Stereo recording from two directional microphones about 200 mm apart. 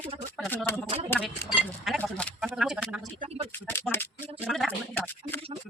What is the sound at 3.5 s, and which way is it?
Speech, 10° left (ahead or behind).